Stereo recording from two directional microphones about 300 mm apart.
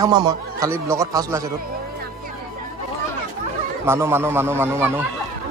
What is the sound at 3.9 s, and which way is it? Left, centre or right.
A man's voice, centre.